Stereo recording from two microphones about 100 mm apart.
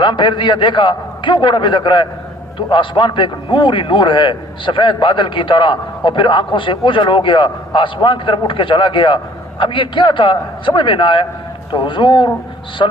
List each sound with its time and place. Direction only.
0.0 s a man's voice: 50° left (ahead or behind)